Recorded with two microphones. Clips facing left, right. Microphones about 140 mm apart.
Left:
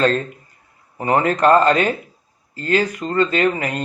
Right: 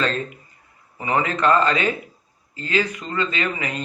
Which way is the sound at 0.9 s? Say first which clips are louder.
Left 5 dB; 45° left (ahead or behind).